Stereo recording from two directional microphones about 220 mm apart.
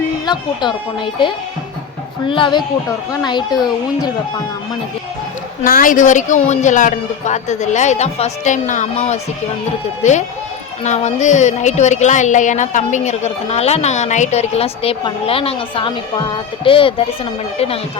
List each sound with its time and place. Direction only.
0.3 s speech: 20° left (ahead or behind)
5.6 s a woman's voice: 40° left (ahead or behind)